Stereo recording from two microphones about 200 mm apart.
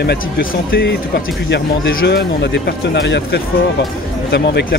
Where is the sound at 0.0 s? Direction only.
50° left (ahead or behind).